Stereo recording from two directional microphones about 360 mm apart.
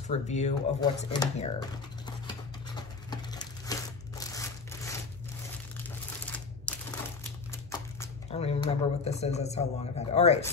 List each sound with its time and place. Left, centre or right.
0.1 s typing: centre
5.9 s a sound: centre
7.7 s speech: centre